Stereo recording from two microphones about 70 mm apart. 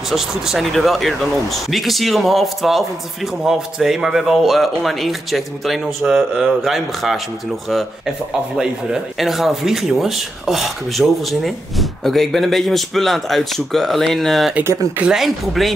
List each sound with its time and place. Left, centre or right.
0.1 s speech: centre
6.0 s speech: centre
6.6 s speech: centre
8.5 s speech: centre
14.6 s speech: right
15.0 s speech: centre